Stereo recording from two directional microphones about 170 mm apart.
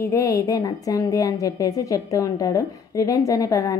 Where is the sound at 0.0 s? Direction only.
15° left (ahead or behind).